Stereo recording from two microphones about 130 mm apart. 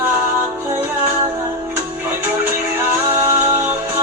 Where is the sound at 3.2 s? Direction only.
25° right (ahead or behind).